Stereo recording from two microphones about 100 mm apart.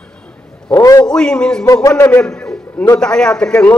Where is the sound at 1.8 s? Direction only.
35° left (ahead or behind).